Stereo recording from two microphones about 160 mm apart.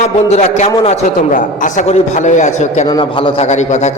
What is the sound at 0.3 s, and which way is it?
A man's voice, 45° left (ahead or behind).